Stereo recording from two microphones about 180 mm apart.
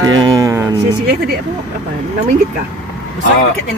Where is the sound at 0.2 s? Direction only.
20° right (ahead or behind).